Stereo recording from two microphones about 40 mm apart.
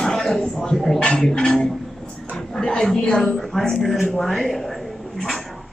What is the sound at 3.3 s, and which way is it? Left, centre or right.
A woman's voice, centre.